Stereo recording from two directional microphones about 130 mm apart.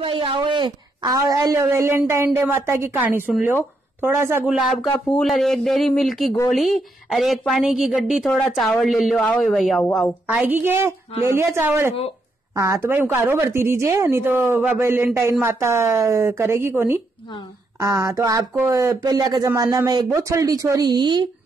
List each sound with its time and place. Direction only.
0.0 s a woman's voice: 40° right (ahead or behind); by 4.5 s 20° right (ahead or behind)
4.5 s a woman's voice: centre (ahead or behind)
10.2 s a woman's voice: 15° right (ahead or behind); by 21.3 s 35° right (ahead or behind)